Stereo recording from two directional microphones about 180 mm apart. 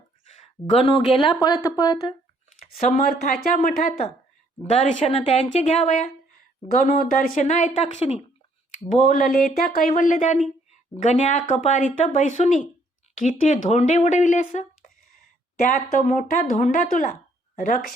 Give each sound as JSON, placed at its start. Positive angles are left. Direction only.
{"t": 0.8, "sound": "speech", "side_deg": 30}
{"t": 2.6, "sound": "speech", "side_deg": 50}
{"t": 4.7, "sound": "speech", "side_deg": 35}
{"t": 8.9, "sound": "speech", "side_deg": 45}